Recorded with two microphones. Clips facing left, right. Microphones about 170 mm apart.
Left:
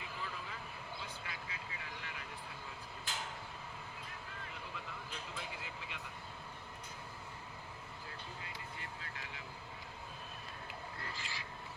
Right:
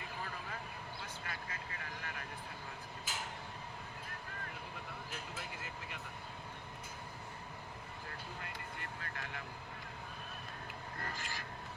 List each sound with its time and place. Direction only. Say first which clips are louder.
0.0 s vehicle: right 1 dB; 50° right (ahead or behind)
5.3 s vehicle: even; 45° right (ahead or behind)
8.4 s vehicle: right 2 dB; 55° right (ahead or behind)
10.9 s a sound: right 2 dB; 50° right (ahead or behind)